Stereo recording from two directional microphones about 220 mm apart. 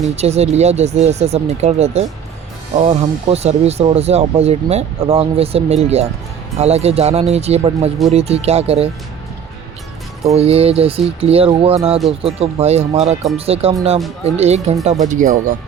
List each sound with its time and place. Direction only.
0.0 s speech: 30° right (ahead or behind)
10.3 s speech: 25° right (ahead or behind)